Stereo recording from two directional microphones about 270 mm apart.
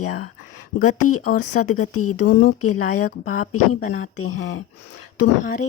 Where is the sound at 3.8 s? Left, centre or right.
Left.